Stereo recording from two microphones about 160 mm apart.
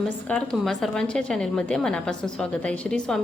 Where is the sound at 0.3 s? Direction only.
Centre (ahead or behind).